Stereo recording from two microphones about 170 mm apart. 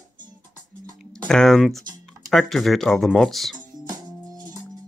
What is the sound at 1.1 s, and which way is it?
Speech, 5° left (ahead or behind).